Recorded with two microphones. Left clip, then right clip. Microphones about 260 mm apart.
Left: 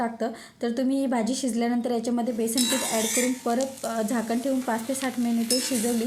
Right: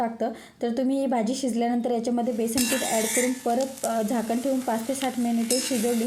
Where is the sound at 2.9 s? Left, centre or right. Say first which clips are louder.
Right 1 dB; right.